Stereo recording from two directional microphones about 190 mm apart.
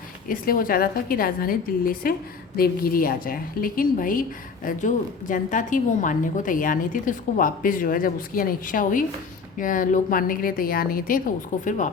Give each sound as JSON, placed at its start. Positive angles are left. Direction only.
{"t": 0.3, "sound": "a woman's voice", "side_deg": 50}